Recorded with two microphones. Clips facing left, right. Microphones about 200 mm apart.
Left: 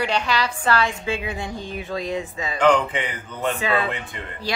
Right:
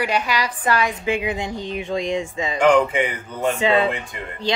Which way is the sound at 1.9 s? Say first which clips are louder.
Right 3 dB; 20° right (ahead or behind).